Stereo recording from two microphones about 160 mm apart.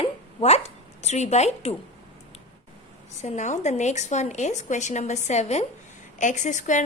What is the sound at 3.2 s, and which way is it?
Speech, 45° left (ahead or behind).